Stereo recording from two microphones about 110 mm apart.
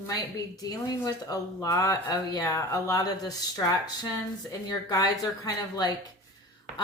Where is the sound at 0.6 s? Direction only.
35° left (ahead or behind).